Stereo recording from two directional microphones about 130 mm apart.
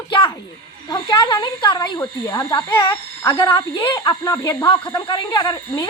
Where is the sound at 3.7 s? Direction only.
35° left (ahead or behind).